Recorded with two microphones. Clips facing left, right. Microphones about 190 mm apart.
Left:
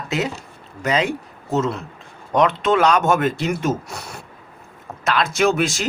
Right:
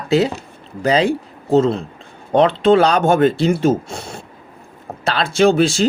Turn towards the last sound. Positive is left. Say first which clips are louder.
# right 5 dB
turn(degrees=-30)  # may be behind; listen again after turning